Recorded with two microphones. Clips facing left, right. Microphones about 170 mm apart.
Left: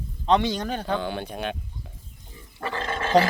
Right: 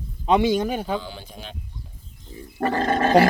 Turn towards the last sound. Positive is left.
turn(degrees=-45)  # may be behind; listen again after turning